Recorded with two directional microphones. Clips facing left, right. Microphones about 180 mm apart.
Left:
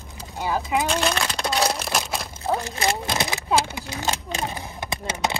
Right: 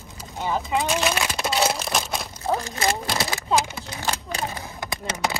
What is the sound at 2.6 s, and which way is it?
Speech, 35° left (ahead or behind).